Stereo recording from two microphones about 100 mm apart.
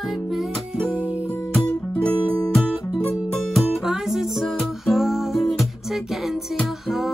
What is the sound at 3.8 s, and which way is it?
Music, 5° right (ahead or behind).